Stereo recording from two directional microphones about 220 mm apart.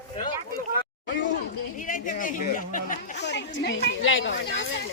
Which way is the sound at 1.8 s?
35° left (ahead or behind).